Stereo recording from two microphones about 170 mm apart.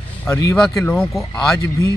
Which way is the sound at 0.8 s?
10° left (ahead or behind).